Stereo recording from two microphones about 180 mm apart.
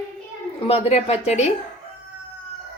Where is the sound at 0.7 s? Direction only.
35° left (ahead or behind).